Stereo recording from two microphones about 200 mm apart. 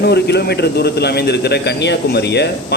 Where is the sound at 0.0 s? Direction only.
55° left (ahead or behind).